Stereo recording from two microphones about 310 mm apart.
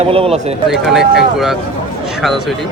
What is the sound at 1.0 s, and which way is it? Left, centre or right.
Speech, right.